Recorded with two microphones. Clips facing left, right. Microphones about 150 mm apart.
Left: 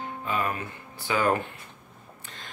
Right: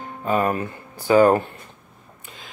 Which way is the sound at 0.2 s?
45° right (ahead or behind).